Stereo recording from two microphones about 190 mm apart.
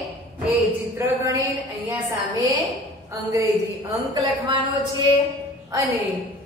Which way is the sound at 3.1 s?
15° right (ahead or behind).